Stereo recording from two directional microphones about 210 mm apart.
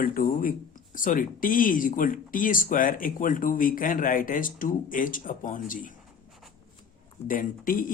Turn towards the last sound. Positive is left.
turn(degrees=40)  # may be behind; listen again after turning